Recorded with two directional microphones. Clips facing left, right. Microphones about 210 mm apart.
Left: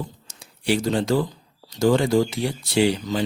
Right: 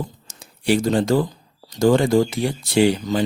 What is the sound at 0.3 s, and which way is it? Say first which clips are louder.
Speech: right 3 dB; 45° right (ahead or behind).